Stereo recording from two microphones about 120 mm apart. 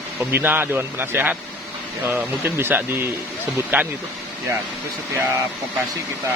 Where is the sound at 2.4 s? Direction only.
15° right (ahead or behind).